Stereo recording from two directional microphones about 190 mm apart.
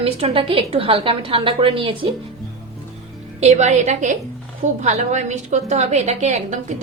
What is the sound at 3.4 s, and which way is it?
A woman's voice, 35° right (ahead or behind).